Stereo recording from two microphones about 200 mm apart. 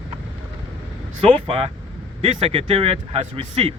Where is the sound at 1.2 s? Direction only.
30° right (ahead or behind).